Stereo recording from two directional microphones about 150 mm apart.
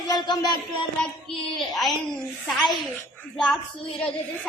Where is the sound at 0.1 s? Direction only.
30° left (ahead or behind).